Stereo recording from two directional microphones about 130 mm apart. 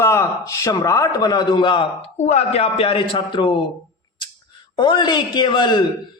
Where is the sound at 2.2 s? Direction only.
60° left (ahead or behind); by 3.5 s 40° left (ahead or behind).